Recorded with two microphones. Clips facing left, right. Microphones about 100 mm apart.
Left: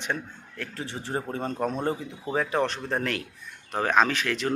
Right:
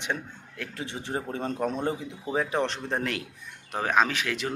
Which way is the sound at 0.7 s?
35° left (ahead or behind).